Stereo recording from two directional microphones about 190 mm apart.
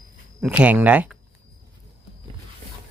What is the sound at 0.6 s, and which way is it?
Speech, 10° right (ahead or behind).